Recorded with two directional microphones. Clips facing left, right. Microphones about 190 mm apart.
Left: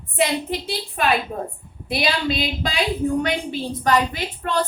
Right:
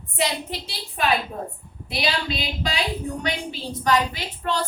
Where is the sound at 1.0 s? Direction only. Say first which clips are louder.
Left 1 dB; 55° left (ahead or behind).